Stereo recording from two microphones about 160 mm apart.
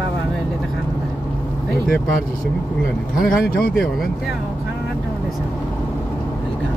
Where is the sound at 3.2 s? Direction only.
70° left (ahead or behind).